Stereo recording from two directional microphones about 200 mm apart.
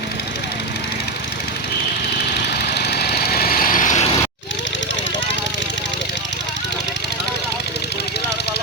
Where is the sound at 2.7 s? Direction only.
55° left (ahead or behind).